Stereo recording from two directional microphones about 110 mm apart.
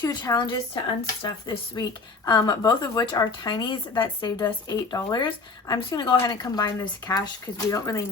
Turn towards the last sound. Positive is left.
turn(degrees=30)  # may be behind; listen again after turning